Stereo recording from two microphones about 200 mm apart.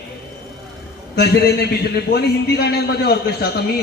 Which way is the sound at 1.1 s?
55° left (ahead or behind).